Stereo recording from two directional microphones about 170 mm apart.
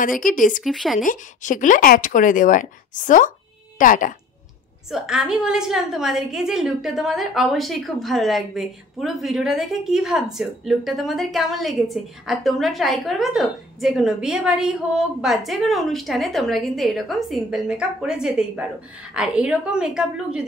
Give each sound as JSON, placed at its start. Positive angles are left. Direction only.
{"t": 0.0, "sound": "speech", "side_deg": 50}
{"t": 0.7, "sound": "a woman's voice", "side_deg": 0}
{"t": 0.9, "sound": "speech", "side_deg": 50}
{"t": 4.9, "sound": "a woman's voice", "side_deg": -5}